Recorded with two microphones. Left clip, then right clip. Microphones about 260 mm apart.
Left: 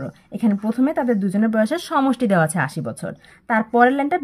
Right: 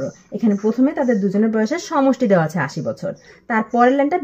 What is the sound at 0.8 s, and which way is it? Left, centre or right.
Speech, left.